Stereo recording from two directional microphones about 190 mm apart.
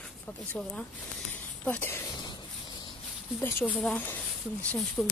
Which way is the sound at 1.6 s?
10° left (ahead or behind).